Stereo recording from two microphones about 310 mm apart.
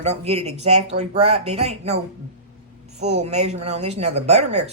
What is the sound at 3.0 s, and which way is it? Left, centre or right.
A woman's voice, right.